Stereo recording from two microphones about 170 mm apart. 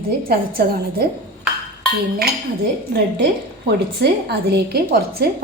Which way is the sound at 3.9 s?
70° right (ahead or behind).